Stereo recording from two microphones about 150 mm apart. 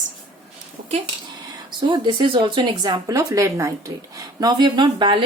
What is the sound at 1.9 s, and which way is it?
A woman's voice, 35° right (ahead or behind).